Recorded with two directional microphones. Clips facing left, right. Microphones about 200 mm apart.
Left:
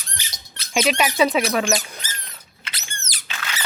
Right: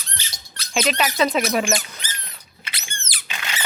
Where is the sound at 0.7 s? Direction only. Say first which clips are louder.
Left 2 dB; 10° left (ahead or behind).